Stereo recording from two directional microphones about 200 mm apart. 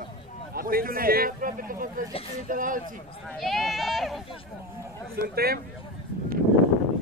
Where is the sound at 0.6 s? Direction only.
45° right (ahead or behind).